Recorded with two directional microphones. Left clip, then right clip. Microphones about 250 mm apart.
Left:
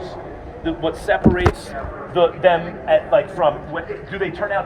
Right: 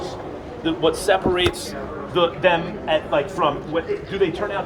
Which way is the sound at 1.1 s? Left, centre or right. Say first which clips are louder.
Left 5 dB; centre.